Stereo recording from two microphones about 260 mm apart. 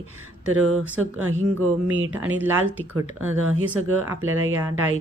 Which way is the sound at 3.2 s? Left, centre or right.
Right.